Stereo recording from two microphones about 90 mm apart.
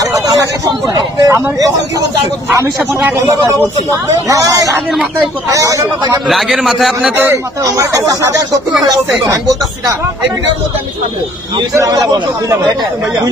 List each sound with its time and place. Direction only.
0.0 s a sound: 35° right (ahead or behind)
0.9 s speech: 40° right (ahead or behind)
4.3 s speech: 40° right (ahead or behind)
6.2 s a man's voice: centre (ahead or behind)
7.6 s speech: 35° right (ahead or behind)
11.7 s speech: 40° right (ahead or behind)